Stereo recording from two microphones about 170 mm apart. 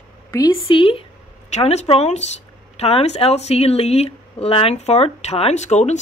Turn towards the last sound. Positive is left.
turn(degrees=40)  # may be behind; listen again after turning